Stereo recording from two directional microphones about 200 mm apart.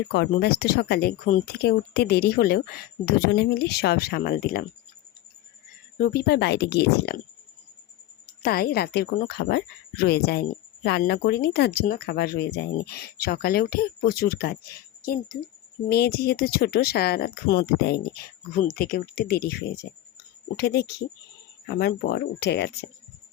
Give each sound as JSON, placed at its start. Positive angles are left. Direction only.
{"t": 0.1, "sound": "speech", "side_deg": 55}
{"t": 6.0, "sound": "speech", "side_deg": 55}
{"t": 8.3, "sound": "speech", "side_deg": 50}